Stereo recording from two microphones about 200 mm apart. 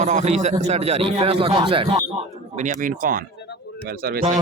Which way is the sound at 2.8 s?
40° right (ahead or behind).